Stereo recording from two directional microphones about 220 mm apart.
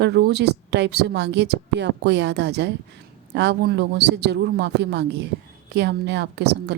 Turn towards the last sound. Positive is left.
turn(degrees=-50)  # may be behind; listen again after turning